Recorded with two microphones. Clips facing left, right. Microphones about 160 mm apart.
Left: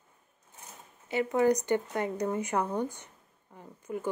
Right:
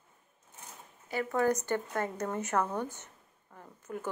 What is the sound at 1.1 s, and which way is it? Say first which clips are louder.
A woman's voice: left 4 dB; 20° left (ahead or behind).